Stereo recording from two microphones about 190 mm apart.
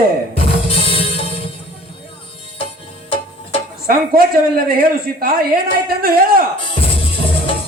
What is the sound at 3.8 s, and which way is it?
A man's voice, 50° right (ahead or behind).